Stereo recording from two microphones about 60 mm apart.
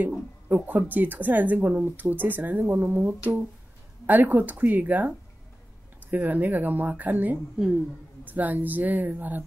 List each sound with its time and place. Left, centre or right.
0.7 s speech: right
7.5 s a woman's voice: centre
8.3 s speech: right